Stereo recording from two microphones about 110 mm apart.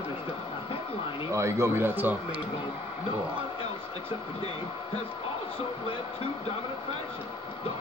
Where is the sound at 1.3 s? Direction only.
25° right (ahead or behind).